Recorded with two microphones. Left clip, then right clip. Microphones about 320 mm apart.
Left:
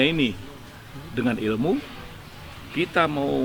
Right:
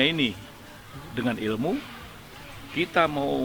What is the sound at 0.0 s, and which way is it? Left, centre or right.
A man's voice, right.